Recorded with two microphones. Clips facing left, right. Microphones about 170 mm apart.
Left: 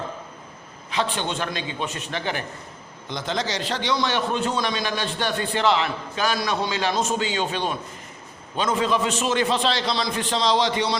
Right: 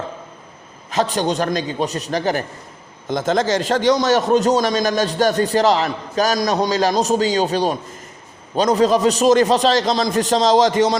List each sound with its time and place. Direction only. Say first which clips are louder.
0.9 s a man's voice: right 7 dB; 40° right (ahead or behind)